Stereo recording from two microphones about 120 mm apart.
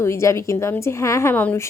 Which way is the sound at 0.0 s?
25° left (ahead or behind).